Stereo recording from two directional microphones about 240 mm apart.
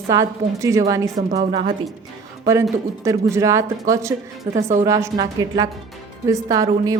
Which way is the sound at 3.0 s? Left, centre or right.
Centre.